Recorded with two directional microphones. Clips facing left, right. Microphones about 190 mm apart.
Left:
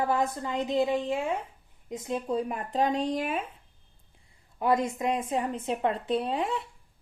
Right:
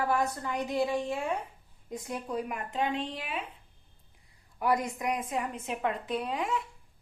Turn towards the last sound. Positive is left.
turn(degrees=30)  # may be behind; listen again after turning